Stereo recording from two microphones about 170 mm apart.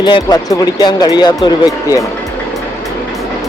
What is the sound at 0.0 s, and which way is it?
Speech, 25° left (ahead or behind).